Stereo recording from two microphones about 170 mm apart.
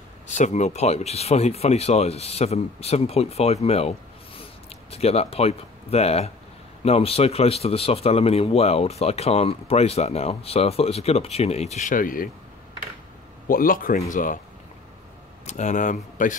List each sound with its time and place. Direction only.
0.4 s speech: 45° left (ahead or behind)
4.9 s speech: 35° left (ahead or behind); by 12.3 s 55° left (ahead or behind)
13.5 s speech: 55° left (ahead or behind)
15.4 s speech: 45° left (ahead or behind)